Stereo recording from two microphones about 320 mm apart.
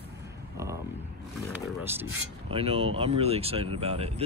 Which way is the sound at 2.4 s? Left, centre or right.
Centre.